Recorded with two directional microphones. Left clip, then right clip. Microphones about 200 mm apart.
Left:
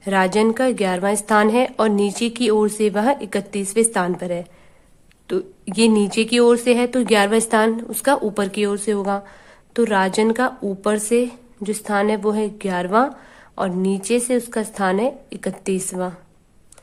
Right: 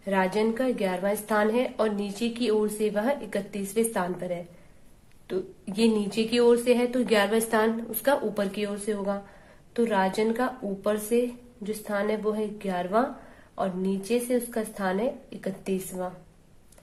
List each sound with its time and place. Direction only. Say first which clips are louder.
0.0 s a woman's voice: left 8 dB; 45° left (ahead or behind)